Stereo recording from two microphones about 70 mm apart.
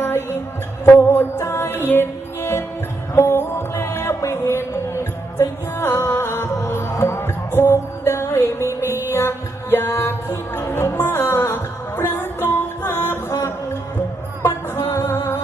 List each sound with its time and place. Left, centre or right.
0.0 s music: left
14.4 s music: left